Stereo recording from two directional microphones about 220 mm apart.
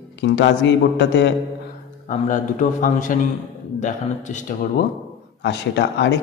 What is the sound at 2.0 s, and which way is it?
A man's voice, 35° left (ahead or behind).